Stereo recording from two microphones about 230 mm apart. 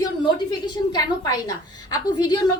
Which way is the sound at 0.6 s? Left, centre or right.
Centre.